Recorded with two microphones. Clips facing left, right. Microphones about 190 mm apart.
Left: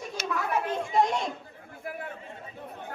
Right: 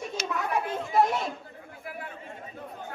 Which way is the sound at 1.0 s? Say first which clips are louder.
Right 1 dB; 5° right (ahead or behind).